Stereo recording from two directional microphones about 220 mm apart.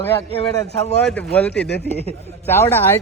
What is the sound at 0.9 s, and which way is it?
Speech, 5° left (ahead or behind).